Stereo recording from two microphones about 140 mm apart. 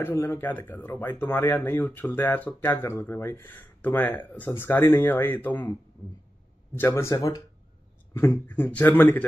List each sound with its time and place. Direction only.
0.0 s speech: 15° left (ahead or behind)
6.8 s speech: 20° left (ahead or behind)